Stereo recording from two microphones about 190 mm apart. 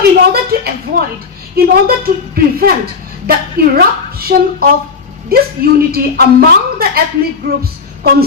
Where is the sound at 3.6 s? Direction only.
55° right (ahead or behind).